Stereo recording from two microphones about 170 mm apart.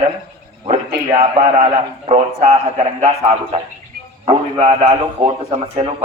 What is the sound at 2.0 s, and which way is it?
Speech, 40° right (ahead or behind).